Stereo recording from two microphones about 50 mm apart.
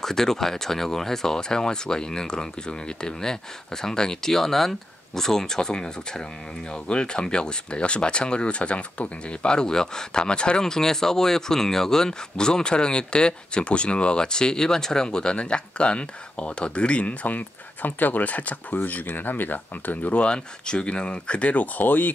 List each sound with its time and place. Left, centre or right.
0.0 s speech: centre; by 22.1 s left